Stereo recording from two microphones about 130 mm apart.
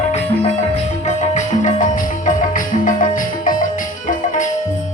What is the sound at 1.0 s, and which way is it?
Music, 70° left (ahead or behind).